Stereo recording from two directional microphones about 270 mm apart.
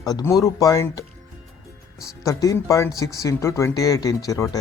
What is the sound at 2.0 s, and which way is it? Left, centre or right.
Speech, centre.